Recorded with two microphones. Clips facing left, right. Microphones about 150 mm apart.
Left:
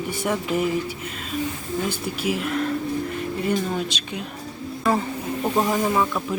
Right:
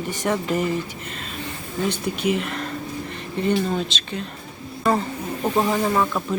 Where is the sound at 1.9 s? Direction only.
5° left (ahead or behind).